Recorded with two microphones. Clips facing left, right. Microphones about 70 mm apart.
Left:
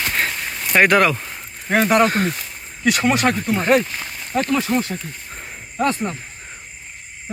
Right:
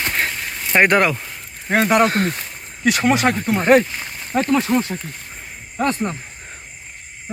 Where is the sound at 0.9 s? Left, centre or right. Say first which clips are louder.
Left 2 dB; right.